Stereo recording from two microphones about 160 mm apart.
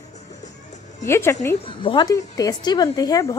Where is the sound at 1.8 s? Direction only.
30° left (ahead or behind).